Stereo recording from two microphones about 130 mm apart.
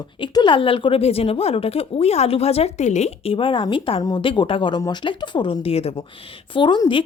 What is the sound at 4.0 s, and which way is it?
Speech, 30° left (ahead or behind).